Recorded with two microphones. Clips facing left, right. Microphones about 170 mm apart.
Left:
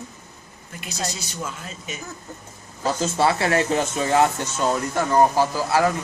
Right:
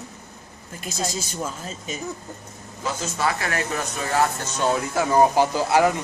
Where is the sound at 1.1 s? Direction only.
35° right (ahead or behind).